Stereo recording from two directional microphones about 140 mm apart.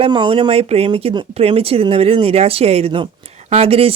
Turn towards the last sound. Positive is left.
turn(degrees=-45)  # may be behind; listen again after turning